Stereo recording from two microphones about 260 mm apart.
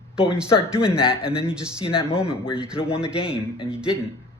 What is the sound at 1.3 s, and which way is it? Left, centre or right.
Speech, centre.